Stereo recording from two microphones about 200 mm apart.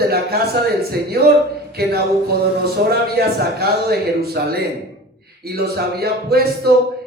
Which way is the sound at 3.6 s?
50° right (ahead or behind).